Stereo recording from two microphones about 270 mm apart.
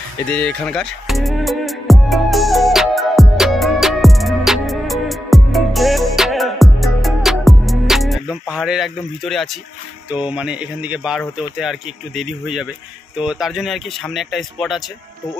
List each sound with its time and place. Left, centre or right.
0.2 s music: centre
10.0 s speech: centre